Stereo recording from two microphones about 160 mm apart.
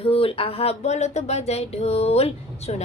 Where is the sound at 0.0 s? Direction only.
35° left (ahead or behind).